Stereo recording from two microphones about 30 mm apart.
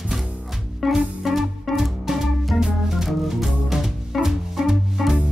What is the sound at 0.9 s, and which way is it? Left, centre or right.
Music, centre.